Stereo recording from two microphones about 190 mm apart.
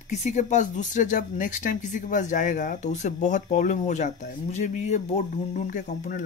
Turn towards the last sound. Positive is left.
turn(degrees=45)  # may be behind; listen again after turning